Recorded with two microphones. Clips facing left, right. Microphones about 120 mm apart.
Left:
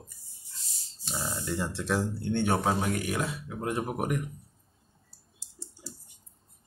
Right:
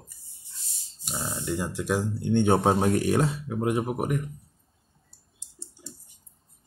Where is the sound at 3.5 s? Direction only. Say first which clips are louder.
Right 6 dB; 15° right (ahead or behind).